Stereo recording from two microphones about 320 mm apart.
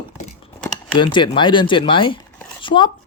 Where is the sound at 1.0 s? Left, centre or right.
Centre.